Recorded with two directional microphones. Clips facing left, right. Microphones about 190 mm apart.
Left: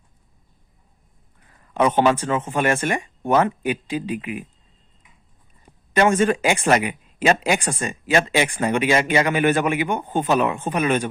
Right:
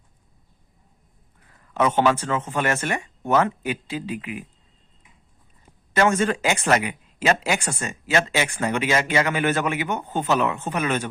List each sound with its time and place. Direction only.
1.9 s speech: 15° left (ahead or behind)
5.9 s speech: 15° left (ahead or behind)